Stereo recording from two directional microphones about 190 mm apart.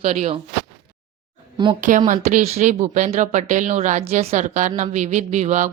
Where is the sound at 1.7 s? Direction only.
40° right (ahead or behind).